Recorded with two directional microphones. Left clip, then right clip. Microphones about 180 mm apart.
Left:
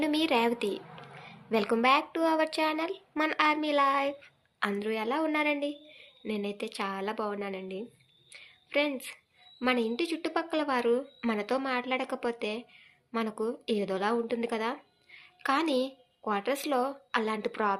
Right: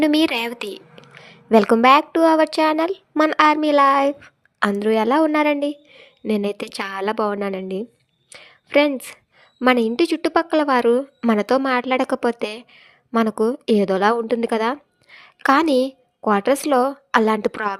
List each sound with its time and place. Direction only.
0.0 s a woman's voice: 55° right (ahead or behind)